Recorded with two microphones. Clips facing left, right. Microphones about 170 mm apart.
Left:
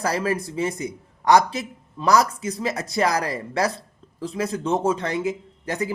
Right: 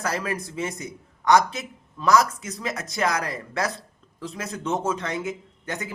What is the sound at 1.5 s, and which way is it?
A man's voice, 30° left (ahead or behind).